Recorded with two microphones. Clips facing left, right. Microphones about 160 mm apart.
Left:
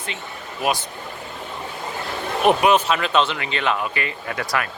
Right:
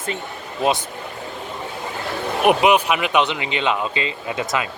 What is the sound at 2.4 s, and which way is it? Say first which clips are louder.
Speech: right 1 dB; 15° right (ahead or behind).